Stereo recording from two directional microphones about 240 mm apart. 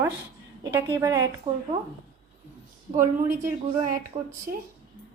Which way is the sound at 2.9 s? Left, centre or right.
Right.